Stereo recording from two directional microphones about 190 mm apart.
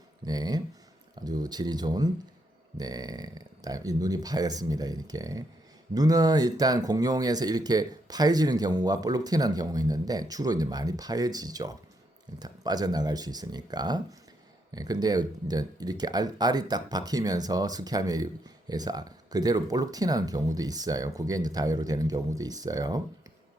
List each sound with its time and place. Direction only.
0.3 s speech: 20° right (ahead or behind)